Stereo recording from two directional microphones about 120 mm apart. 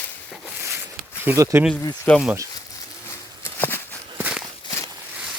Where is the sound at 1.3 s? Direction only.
15° right (ahead or behind).